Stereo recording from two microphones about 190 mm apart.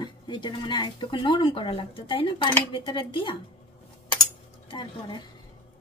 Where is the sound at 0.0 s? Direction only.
25° left (ahead or behind).